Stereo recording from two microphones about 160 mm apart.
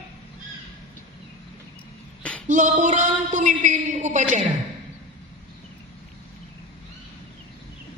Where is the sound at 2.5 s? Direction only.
50° right (ahead or behind).